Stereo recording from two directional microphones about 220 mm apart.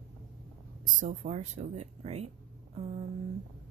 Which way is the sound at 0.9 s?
35° right (ahead or behind).